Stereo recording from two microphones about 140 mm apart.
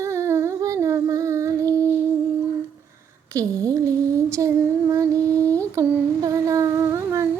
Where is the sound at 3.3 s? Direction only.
25° right (ahead or behind).